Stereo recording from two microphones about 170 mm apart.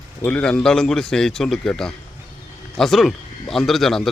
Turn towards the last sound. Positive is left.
turn(degrees=0)  # may be behind; listen again after turning